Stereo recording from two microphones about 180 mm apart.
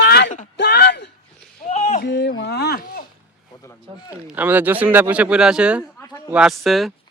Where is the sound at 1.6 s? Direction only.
40° left (ahead or behind).